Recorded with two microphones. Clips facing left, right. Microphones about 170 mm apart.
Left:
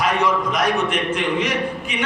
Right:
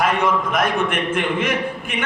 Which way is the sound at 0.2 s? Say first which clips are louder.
Right 1 dB; 50° right (ahead or behind).